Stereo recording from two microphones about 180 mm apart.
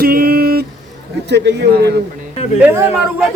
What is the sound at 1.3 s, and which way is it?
Speech, 70° right (ahead or behind).